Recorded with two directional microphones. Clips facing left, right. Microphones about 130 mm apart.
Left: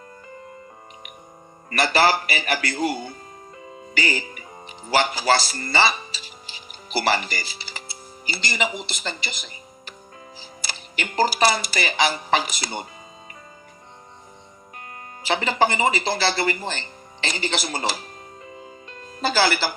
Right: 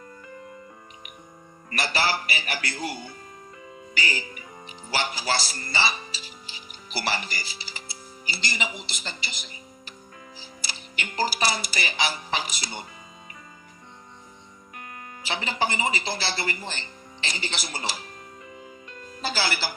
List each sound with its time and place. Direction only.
1.7 s speech: 65° left (ahead or behind)
3.9 s speech: 65° left (ahead or behind)
6.9 s speech: 60° left (ahead or behind)
15.2 s speech: 60° left (ahead or behind)
18.4 s music: 30° left (ahead or behind)
19.2 s speech: 70° left (ahead or behind)